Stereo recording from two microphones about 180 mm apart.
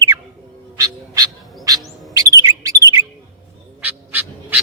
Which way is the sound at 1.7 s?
20° right (ahead or behind).